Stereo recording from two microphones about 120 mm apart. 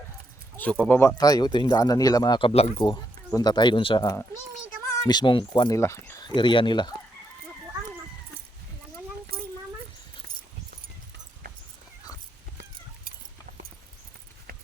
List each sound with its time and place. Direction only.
0.5 s speech: 10° left (ahead or behind)
1.2 s speech: 35° left (ahead or behind)
2.4 s speech: 55° left (ahead or behind)
3.3 s speech: 35° left (ahead or behind)
5.7 s speech: 25° left (ahead or behind)
6.2 s speech: 40° left (ahead or behind)